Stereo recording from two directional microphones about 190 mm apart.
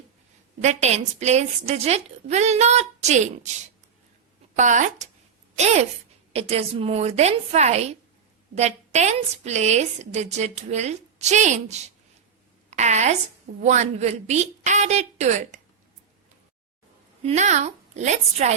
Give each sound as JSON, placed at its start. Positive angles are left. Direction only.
{"t": 0.6, "sound": "a woman's voice", "side_deg": -35}
{"t": 4.5, "sound": "a woman's voice", "side_deg": -40}
{"t": 17.2, "sound": "a woman's voice", "side_deg": -35}